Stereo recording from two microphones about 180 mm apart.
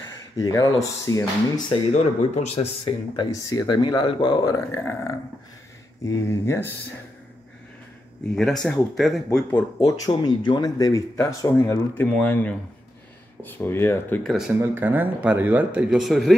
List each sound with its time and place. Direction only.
0.4 s speech: 20° left (ahead or behind)
1.7 s speech: 35° left (ahead or behind); by 6.7 s 15° left (ahead or behind)
8.4 s speech: centre (ahead or behind)
9.8 s speech: 20° left (ahead or behind)
14.5 s speech: 10° right (ahead or behind)